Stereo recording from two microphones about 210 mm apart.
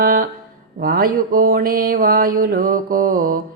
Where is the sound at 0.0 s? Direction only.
40° right (ahead or behind).